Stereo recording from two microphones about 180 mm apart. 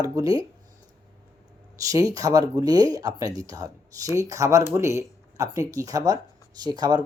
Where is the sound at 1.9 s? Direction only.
20° right (ahead or behind).